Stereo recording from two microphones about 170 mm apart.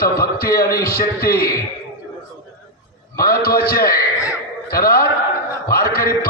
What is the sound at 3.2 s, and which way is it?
A man's voice, 60° left (ahead or behind).